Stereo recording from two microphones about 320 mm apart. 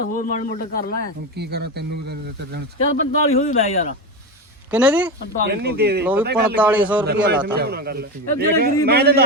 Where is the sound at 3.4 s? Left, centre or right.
Left.